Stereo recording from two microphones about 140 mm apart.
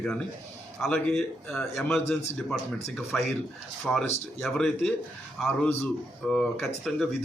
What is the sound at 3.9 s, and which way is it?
Speech, centre (ahead or behind).